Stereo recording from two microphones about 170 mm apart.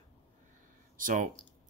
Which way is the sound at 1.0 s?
50° right (ahead or behind).